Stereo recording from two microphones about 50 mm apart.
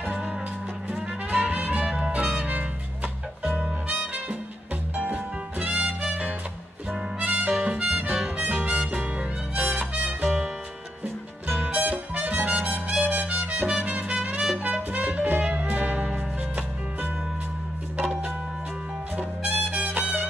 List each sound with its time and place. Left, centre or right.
1.3 s music: right
1.9 s music: centre
2.3 s music: right
7.2 s music: right
7.5 s music: centre
7.8 s music: right
11.8 s music: right
17.9 s music: right
19.7 s music: right